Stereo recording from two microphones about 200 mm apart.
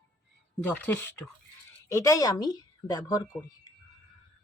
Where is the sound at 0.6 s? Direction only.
10° left (ahead or behind).